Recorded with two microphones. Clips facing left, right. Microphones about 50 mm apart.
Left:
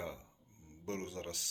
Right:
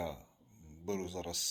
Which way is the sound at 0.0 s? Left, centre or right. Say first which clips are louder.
Right 3 dB; left.